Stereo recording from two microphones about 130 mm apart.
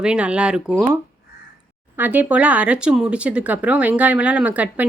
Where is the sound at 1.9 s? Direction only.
10° right (ahead or behind).